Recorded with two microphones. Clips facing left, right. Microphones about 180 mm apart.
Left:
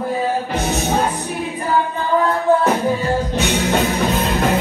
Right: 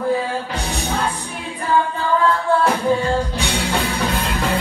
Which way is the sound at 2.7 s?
10° right (ahead or behind).